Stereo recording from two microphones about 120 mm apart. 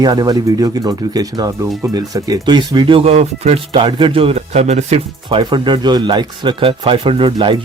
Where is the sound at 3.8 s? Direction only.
45° right (ahead or behind); by 5.0 s 65° right (ahead or behind).